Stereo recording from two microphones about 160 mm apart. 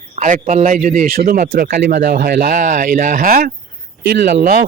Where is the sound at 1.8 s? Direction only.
90° right.